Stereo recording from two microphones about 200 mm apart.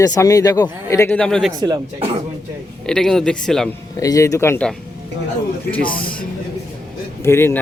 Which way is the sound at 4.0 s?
15° left (ahead or behind).